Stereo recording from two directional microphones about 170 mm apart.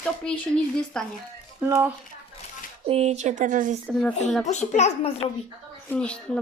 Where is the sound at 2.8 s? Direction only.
35° right (ahead or behind).